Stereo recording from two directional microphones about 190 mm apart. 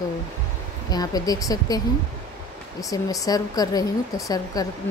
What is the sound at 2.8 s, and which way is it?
Speech, 20° left (ahead or behind).